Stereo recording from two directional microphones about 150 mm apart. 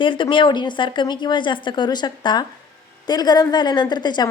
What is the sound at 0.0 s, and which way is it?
A woman's voice, 35° left (ahead or behind).